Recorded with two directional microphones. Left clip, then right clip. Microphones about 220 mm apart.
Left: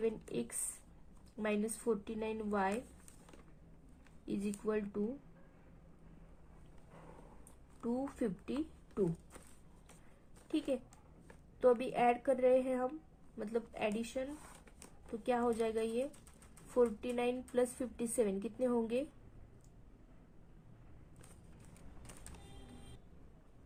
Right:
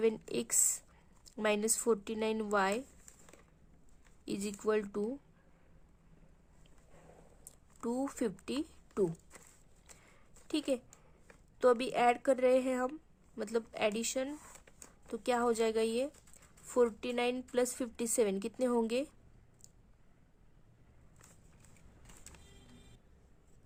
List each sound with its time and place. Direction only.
0.0 s a sound: 45° right (ahead or behind)
1.2 s speech: 45° right (ahead or behind)
4.3 s speech: 45° right (ahead or behind)
7.8 s a woman's voice: 40° right (ahead or behind)
11.6 s a woman's voice: 45° right (ahead or behind)